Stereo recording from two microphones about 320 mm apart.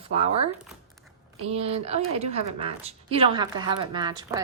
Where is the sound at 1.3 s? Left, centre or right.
Centre.